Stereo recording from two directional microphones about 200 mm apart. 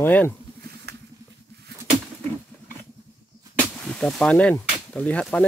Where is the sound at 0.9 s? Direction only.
55° right (ahead or behind).